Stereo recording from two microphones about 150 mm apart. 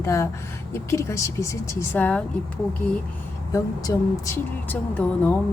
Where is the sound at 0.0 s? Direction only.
20° left (ahead or behind).